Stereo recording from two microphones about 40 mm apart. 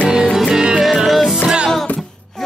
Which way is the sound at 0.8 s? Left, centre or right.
Centre.